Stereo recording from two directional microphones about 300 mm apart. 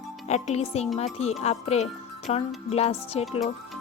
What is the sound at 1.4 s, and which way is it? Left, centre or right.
Speech, left.